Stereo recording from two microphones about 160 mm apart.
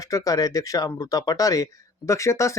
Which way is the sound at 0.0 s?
20° left (ahead or behind).